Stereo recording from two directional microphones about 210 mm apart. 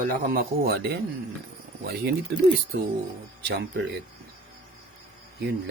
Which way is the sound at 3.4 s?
55° right (ahead or behind).